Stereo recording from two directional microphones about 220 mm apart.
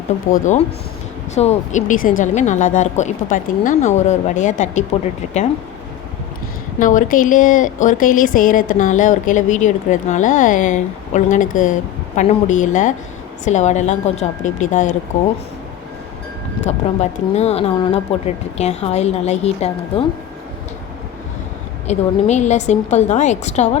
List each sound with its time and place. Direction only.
0.3 s a woman's voice: 35° left (ahead or behind)
6.7 s a woman's voice: 35° left (ahead or behind)
16.6 s speech: 30° left (ahead or behind)
21.8 s a woman's voice: 30° left (ahead or behind)